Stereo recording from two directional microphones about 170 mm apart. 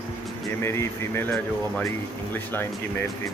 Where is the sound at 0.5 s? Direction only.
15° left (ahead or behind).